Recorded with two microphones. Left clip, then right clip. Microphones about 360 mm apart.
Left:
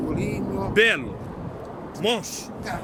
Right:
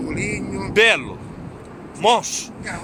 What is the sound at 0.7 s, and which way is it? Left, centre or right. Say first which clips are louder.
Speech: right 5 dB; centre.